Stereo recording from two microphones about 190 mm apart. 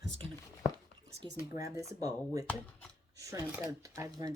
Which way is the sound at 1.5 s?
15° right (ahead or behind).